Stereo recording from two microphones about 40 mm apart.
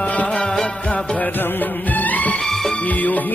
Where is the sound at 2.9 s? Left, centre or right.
Left.